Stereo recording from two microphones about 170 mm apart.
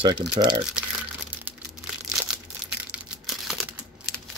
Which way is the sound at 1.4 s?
Centre (ahead or behind).